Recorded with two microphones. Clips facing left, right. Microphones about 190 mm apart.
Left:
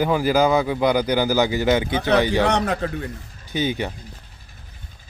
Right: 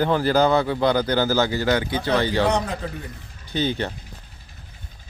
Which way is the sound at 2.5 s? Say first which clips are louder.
Left 2 dB; 75° left (ahead or behind).